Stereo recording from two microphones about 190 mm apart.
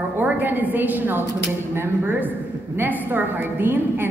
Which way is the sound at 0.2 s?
10° right (ahead or behind).